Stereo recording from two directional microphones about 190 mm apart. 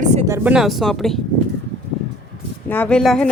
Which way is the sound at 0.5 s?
Centre (ahead or behind).